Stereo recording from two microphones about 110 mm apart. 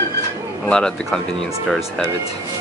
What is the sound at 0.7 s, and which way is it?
Speech, 5° left (ahead or behind).